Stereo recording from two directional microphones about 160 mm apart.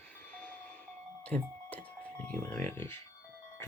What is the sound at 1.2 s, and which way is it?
Doorbell, 10° left (ahead or behind).